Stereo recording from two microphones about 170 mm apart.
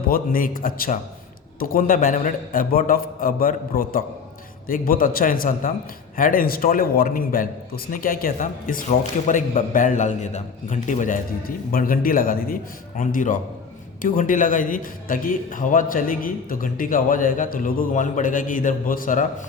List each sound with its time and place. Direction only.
0.1 s a man's voice: 55° left (ahead or behind)